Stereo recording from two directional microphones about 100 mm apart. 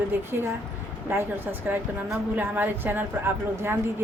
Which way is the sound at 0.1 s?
25° right (ahead or behind).